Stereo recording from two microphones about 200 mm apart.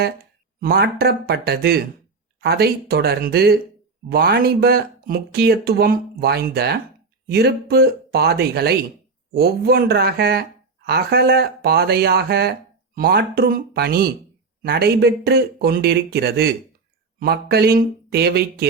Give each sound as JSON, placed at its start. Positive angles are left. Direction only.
{"t": 0.6, "sound": "speech", "side_deg": -50}